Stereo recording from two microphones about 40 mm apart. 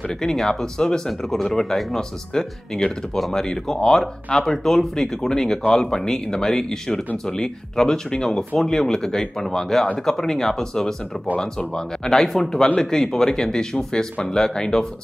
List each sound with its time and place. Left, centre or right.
0.2 s speech: centre
12.6 s speech: centre